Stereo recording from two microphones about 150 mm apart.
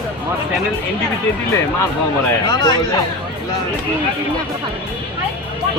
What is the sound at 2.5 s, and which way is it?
Speech, 30° left (ahead or behind).